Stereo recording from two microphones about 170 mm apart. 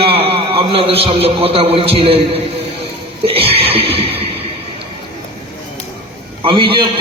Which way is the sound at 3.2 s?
35° right (ahead or behind).